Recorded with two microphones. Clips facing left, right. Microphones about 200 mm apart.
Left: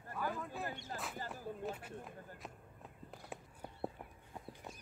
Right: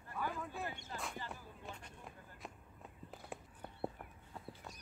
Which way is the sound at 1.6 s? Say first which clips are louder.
Left 8 dB; 5° left (ahead or behind).